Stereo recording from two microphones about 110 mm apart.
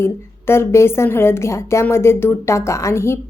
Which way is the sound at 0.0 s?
20° left (ahead or behind).